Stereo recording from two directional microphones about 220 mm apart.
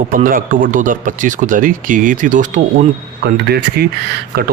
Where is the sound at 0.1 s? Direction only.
40° right (ahead or behind).